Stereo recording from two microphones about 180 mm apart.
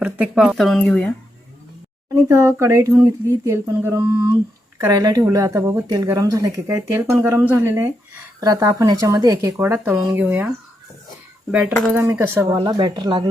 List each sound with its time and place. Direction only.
0.0 s speech: 5° right (ahead or behind)
2.1 s speech: 15° right (ahead or behind)
11.9 s speech: 15° right (ahead or behind)
12.5 s speech: 25° right (ahead or behind)